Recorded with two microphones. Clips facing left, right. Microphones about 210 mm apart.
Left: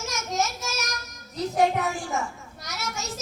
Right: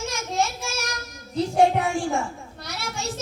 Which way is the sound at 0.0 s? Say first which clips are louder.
Right 2 dB; 30° right (ahead or behind).